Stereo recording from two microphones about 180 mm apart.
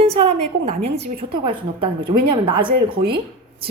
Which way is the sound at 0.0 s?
35° right (ahead or behind).